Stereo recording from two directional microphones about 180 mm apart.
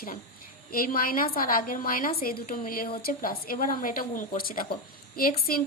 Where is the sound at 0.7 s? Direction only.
50° left (ahead or behind).